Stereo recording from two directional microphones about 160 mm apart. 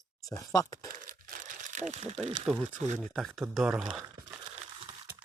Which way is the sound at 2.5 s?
Centre (ahead or behind).